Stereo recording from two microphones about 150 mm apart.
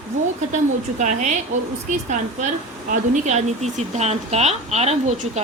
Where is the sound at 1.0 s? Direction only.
55° right (ahead or behind).